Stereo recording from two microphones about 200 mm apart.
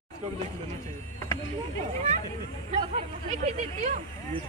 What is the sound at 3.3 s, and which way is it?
Speech, 35° right (ahead or behind).